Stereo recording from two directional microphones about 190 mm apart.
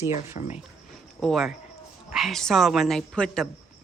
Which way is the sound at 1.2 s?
Centre (ahead or behind).